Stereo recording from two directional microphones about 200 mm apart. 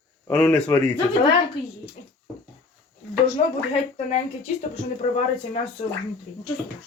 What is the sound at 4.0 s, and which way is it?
Speech, 30° left (ahead or behind).